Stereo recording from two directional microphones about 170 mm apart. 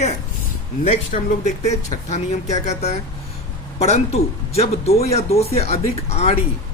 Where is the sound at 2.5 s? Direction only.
40° left (ahead or behind).